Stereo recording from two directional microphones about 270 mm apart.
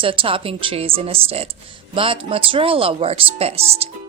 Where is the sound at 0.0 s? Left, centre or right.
Centre.